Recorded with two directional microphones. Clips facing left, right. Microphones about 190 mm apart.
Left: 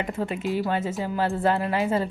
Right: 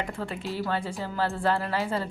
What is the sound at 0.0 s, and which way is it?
A woman's voice, 20° left (ahead or behind).